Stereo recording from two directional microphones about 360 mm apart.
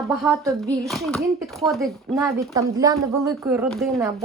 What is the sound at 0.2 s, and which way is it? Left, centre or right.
Speech, centre.